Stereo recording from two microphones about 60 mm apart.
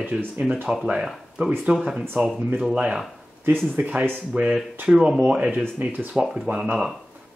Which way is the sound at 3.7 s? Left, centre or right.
Right.